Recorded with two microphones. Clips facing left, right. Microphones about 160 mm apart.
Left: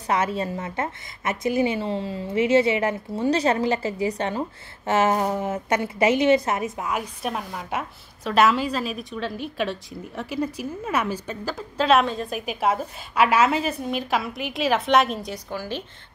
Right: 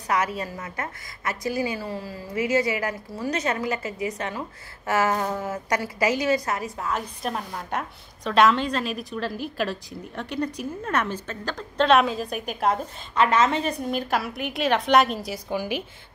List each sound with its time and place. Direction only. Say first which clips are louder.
0.1 s a woman's voice: left 2 dB; 25° left (ahead or behind)
6.9 s a woman's voice: left 1 dB; 5° left (ahead or behind)
15.5 s speech: right 4 dB; 15° right (ahead or behind)